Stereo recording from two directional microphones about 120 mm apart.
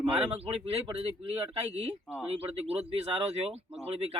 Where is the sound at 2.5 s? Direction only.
55° right (ahead or behind).